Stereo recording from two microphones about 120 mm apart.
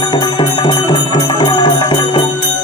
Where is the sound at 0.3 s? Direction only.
45° left (ahead or behind).